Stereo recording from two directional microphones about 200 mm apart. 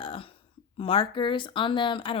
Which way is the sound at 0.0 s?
25° left (ahead or behind).